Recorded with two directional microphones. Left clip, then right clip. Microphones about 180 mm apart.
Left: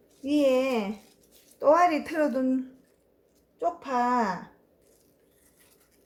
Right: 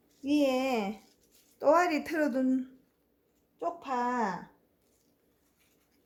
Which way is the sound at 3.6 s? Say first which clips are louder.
Left 5 dB; 25° right (ahead or behind).